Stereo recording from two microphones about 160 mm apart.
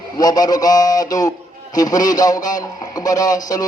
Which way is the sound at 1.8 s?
25° left (ahead or behind).